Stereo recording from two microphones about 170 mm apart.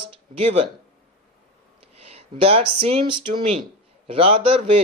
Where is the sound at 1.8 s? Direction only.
35° right (ahead or behind).